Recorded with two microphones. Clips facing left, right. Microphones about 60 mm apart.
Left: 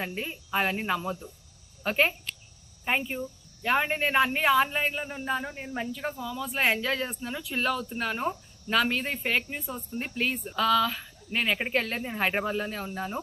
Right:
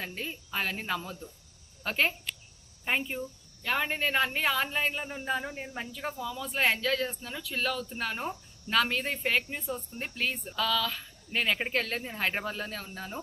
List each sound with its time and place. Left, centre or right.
0.0 s speech: centre
3.6 s speech: centre